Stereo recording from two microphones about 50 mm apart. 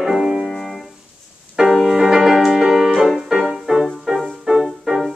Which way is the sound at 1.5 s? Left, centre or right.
Centre.